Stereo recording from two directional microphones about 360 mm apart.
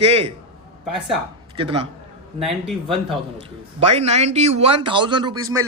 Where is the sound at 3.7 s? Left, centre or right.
Centre.